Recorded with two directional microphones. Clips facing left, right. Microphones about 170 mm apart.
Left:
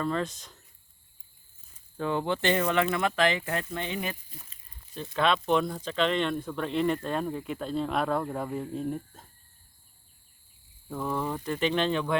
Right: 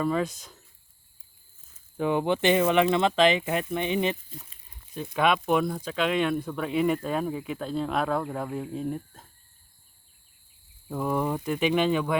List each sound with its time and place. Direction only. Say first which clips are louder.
0.0 s speech: right 3 dB; 10° right (ahead or behind)
2.0 s speech: right 4 dB; 15° right (ahead or behind)
10.8 s speech: right 4 dB; 10° right (ahead or behind)